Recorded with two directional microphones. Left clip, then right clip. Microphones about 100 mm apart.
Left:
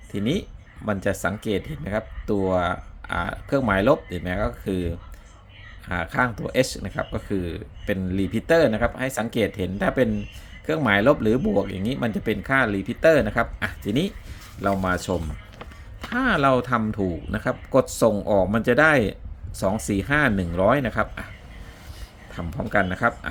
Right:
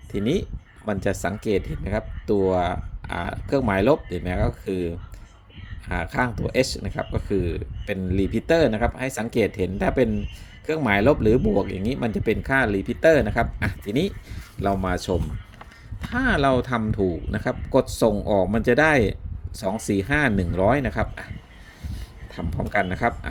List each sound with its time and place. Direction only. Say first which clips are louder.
0.1 s speech: right 2 dB; 20° right (ahead or behind)
22.3 s speech: left 1 dB; 15° right (ahead or behind)